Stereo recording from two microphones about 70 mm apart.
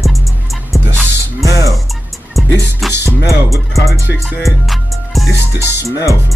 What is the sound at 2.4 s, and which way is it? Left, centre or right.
Music, centre.